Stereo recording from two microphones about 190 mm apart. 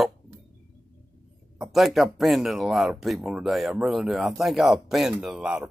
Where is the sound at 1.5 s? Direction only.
Centre (ahead or behind).